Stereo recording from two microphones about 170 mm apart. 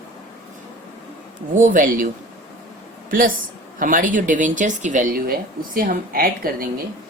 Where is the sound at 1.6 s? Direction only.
50° right (ahead or behind).